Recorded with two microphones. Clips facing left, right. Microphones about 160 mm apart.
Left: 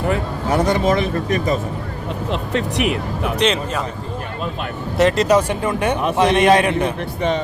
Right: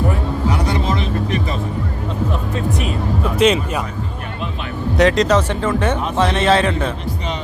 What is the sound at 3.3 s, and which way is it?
Speech, 10° right (ahead or behind).